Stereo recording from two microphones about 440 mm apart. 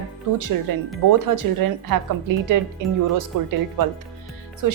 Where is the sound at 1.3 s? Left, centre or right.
Right.